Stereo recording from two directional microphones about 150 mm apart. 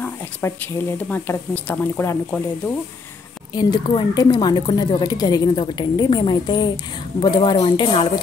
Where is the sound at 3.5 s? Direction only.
30° left (ahead or behind).